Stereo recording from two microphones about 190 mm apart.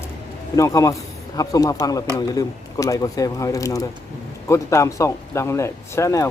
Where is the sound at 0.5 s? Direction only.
15° left (ahead or behind).